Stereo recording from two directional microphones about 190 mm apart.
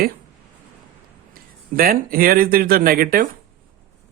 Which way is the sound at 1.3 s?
50° right (ahead or behind).